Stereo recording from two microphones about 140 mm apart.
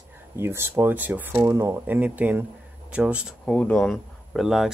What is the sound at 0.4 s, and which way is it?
Speech, 15° right (ahead or behind).